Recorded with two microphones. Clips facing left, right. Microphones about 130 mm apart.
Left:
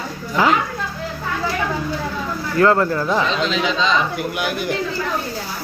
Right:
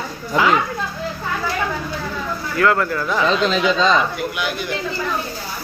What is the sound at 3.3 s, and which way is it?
Speech, 45° right (ahead or behind).